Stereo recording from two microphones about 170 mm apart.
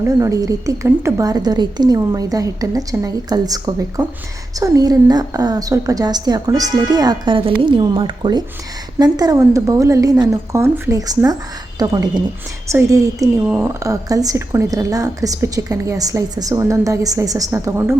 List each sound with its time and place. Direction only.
0.2 s speech: 20° right (ahead or behind)